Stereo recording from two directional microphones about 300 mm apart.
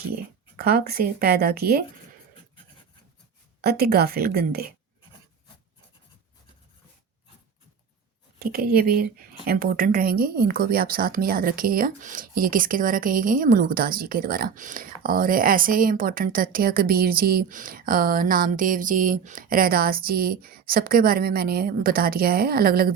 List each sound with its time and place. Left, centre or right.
0.5 s speech: right
3.6 s speech: right
8.4 s a woman's voice: right